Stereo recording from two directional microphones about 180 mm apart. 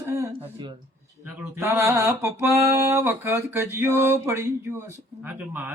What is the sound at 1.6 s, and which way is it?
Mantra, 15° right (ahead or behind).